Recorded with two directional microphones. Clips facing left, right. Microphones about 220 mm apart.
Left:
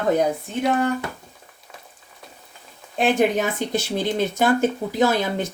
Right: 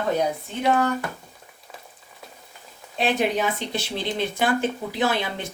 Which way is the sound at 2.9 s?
45° left (ahead or behind).